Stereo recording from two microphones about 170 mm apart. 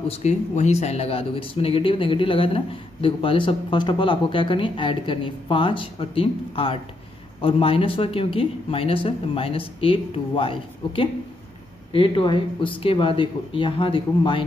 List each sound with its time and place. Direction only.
0.2 s speech: 40° left (ahead or behind)